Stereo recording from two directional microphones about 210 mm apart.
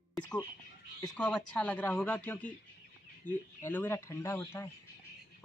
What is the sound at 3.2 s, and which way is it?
Speech, 40° left (ahead or behind).